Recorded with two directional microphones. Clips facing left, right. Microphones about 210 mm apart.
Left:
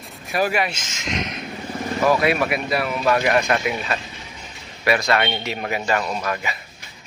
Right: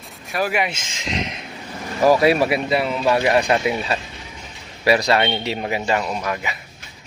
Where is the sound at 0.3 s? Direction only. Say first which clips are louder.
Left 1 dB; 5° left (ahead or behind).